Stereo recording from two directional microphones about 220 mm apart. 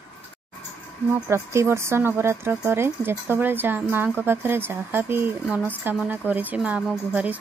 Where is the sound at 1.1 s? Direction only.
10° right (ahead or behind).